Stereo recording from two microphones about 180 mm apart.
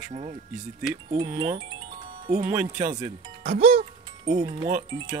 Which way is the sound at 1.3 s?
25° right (ahead or behind).